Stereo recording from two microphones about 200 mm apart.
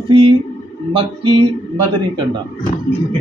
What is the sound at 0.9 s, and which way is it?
Speech, 25° right (ahead or behind).